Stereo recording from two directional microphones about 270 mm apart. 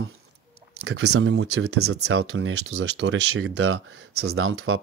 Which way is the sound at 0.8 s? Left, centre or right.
Right.